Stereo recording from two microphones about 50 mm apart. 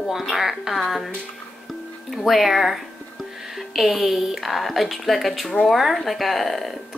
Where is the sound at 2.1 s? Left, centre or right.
Centre.